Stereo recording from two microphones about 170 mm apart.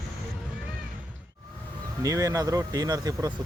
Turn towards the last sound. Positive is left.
turn(degrees=-20)  # may be behind; listen again after turning